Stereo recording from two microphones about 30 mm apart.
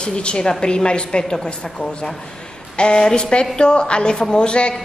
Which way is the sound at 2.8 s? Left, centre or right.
Left.